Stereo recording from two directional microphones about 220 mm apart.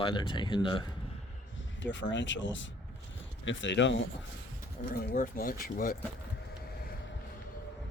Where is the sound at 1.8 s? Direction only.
55° left (ahead or behind).